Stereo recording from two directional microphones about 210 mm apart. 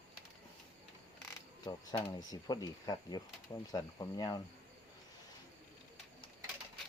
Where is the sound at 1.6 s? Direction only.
20° left (ahead or behind).